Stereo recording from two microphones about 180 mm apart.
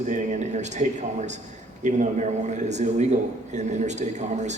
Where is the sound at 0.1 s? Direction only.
40° right (ahead or behind).